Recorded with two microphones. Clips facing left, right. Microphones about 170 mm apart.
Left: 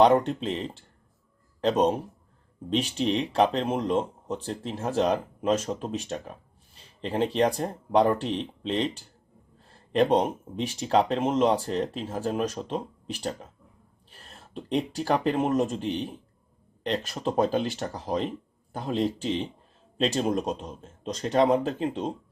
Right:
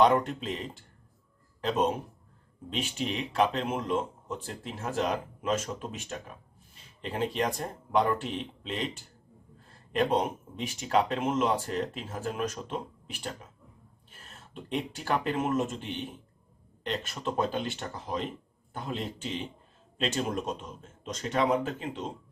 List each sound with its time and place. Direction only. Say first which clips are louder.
0.0 s speech: left 4 dB; 30° left (ahead or behind)
14.1 s a sound: left 6 dB; 35° left (ahead or behind)
14.8 s speech: left 5 dB; 35° left (ahead or behind)